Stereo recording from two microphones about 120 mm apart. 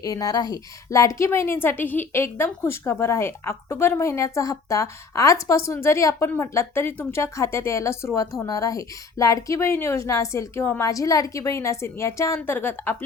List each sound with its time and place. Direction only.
0.0 s a woman's voice: 30° left (ahead or behind)